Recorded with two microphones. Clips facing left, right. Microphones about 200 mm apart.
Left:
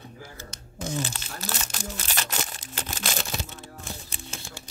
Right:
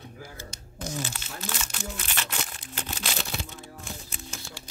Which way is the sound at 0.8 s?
35° left (ahead or behind).